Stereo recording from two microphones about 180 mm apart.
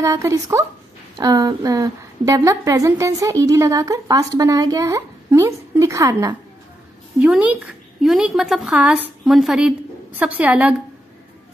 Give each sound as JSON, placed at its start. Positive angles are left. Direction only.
{"t": 0.0, "sound": "a woman's voice", "side_deg": -15}
{"t": 7.2, "sound": "speech", "side_deg": -5}